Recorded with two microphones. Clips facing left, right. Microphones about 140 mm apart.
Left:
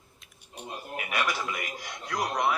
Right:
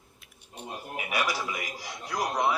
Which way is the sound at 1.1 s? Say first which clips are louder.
Even; 10° right (ahead or behind).